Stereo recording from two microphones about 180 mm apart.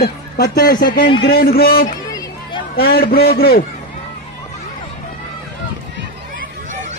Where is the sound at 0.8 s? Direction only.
60° left (ahead or behind).